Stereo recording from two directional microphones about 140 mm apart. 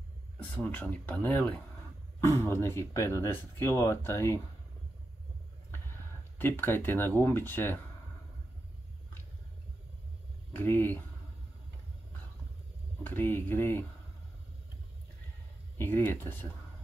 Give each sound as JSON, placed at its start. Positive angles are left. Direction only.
{"t": 0.4, "sound": "speech", "side_deg": 10}
{"t": 5.7, "sound": "speech", "side_deg": 15}
{"t": 10.5, "sound": "speech", "side_deg": 15}
{"t": 13.0, "sound": "speech", "side_deg": 15}
{"t": 15.8, "sound": "speech", "side_deg": 15}